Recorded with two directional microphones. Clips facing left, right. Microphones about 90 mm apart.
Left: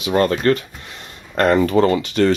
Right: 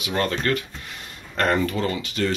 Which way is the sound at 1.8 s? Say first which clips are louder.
Left 9 dB; 55° left (ahead or behind).